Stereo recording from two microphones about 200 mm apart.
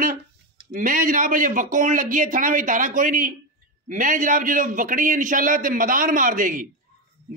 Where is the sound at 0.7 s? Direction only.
45° right (ahead or behind).